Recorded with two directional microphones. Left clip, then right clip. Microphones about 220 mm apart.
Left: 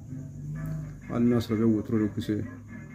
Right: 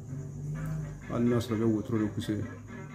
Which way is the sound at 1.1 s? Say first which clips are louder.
Left 3 dB; 10° left (ahead or behind).